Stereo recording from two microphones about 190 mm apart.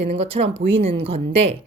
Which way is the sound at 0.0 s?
30° right (ahead or behind).